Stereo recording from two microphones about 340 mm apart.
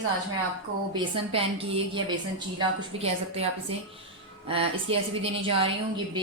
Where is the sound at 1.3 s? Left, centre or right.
Centre.